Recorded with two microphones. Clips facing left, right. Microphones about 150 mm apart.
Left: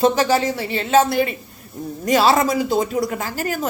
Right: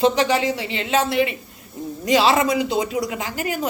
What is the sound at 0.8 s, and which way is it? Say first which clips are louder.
A woman's voice: left 4 dB; 40° left (ahead or behind).